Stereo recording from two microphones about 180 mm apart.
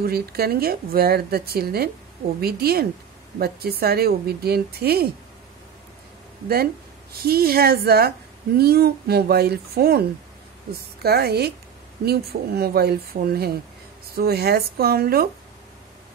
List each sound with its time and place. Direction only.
0.0 s a woman's voice: 60° right (ahead or behind)
6.5 s a woman's voice: 60° right (ahead or behind)